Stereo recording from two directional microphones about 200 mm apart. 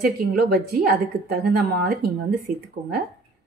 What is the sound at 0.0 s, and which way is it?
Speech, 50° right (ahead or behind).